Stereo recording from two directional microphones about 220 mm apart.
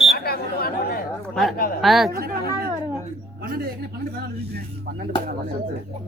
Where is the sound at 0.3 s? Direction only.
45° left (ahead or behind).